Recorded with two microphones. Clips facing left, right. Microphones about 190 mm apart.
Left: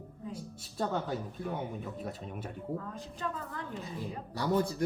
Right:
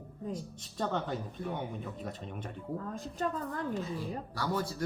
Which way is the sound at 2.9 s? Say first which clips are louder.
Right 4 dB; 45° right (ahead or behind).